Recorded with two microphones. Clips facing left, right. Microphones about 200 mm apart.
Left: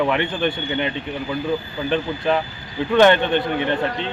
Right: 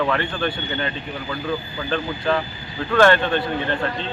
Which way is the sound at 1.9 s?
20° left (ahead or behind).